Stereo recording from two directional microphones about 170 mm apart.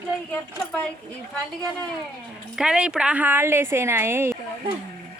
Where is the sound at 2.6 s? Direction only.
5° right (ahead or behind).